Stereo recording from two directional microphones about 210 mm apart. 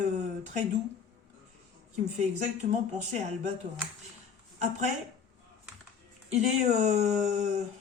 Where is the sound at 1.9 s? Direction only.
35° right (ahead or behind).